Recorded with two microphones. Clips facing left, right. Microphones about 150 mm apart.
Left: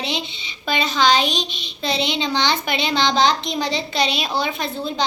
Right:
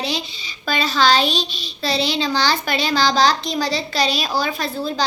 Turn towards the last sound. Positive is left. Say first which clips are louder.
# right 1 dB
turn(degrees=20)  # may be behind; listen again after turning